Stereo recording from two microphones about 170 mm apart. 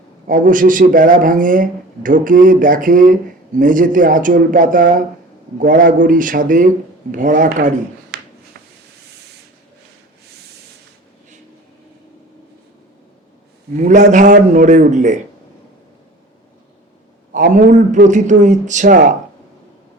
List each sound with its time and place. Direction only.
0.3 s speech: 50° right (ahead or behind)
8.1 s a sound: 70° right (ahead or behind)
13.7 s speech: 45° right (ahead or behind)
17.5 s speech: 45° right (ahead or behind)